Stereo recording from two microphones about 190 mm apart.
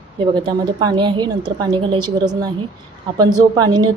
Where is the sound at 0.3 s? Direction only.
20° right (ahead or behind).